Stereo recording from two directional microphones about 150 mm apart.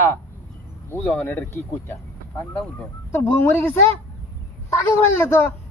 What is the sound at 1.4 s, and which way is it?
Speech, 20° left (ahead or behind).